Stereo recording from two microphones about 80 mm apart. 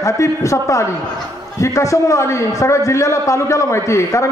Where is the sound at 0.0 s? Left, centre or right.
Left.